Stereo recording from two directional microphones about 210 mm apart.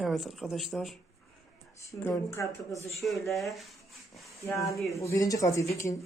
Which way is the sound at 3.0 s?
Centre (ahead or behind).